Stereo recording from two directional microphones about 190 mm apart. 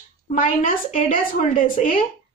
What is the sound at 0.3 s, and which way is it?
A woman's voice, 45° left (ahead or behind).